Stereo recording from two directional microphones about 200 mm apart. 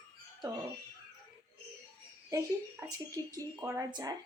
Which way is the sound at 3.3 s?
20° right (ahead or behind).